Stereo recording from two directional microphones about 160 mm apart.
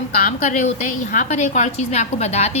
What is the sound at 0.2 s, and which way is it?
A woman's voice, 55° left (ahead or behind).